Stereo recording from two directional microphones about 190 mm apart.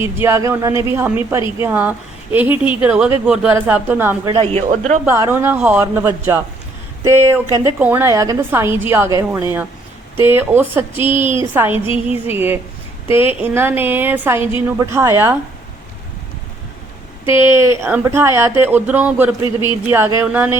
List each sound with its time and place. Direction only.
0.0 s a woman's voice: 10° right (ahead or behind)
4.3 s speech: 30° right (ahead or behind)
5.0 s a woman's voice: 15° right (ahead or behind)
7.6 s a woman's voice: 10° right (ahead or behind)
17.3 s a woman's voice: 15° right (ahead or behind)